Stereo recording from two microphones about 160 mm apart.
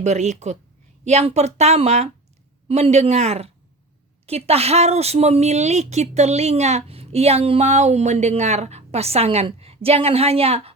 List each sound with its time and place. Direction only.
0.0 s speech: 45° right (ahead or behind)